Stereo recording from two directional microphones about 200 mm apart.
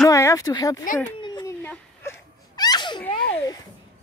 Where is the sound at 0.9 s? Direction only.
20° left (ahead or behind).